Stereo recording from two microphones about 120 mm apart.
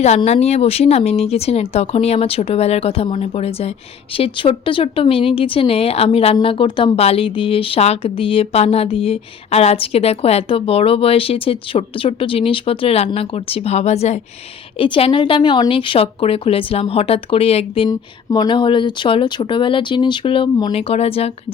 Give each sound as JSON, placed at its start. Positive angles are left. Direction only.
{"t": 0.3, "sound": "speech", "side_deg": 65}
{"t": 4.2, "sound": "speech", "side_deg": 50}
{"t": 14.8, "sound": "speech", "side_deg": 45}
{"t": 17.8, "sound": "speech", "side_deg": 35}
{"t": 20.7, "sound": "speech", "side_deg": 55}